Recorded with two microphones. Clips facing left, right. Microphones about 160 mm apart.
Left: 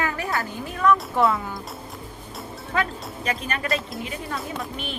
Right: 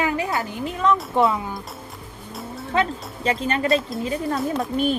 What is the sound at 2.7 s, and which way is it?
Speech, 25° right (ahead or behind).